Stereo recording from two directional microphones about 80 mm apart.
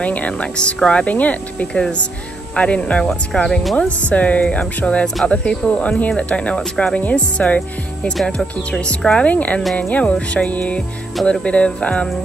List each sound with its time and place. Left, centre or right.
0.0 s speech: centre